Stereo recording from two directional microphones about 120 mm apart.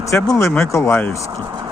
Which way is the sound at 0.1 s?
25° left (ahead or behind).